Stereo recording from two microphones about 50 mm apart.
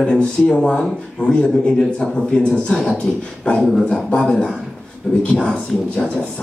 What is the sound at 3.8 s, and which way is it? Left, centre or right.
Speech, centre.